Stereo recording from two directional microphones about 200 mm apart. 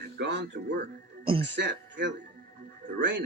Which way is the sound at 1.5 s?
60° right (ahead or behind).